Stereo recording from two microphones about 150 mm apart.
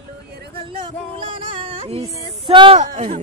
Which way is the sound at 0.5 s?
35° right (ahead or behind).